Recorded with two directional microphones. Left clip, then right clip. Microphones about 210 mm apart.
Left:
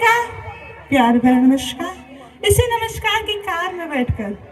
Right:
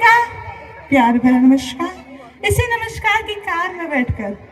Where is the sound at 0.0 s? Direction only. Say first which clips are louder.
Right 4 dB; 35° left (ahead or behind).